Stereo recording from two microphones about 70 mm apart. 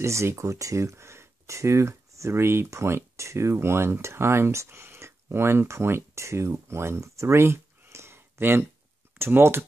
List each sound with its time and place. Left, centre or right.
0.0 s speech: right